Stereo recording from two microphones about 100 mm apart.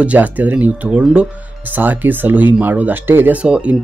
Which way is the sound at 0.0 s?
15° right (ahead or behind).